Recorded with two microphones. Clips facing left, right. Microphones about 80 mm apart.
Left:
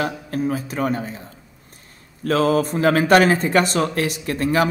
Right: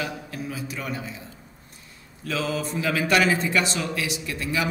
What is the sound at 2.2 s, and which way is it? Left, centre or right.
A man's voice, left.